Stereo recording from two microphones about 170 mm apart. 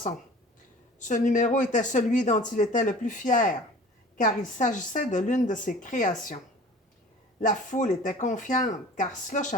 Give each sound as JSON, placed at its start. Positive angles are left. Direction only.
{"t": 0.9, "sound": "speech", "side_deg": 50}
{"t": 7.4, "sound": "speech", "side_deg": 45}